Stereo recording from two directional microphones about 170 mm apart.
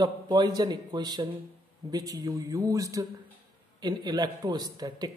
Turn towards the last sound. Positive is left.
turn(degrees=-25)  # may be behind; listen again after turning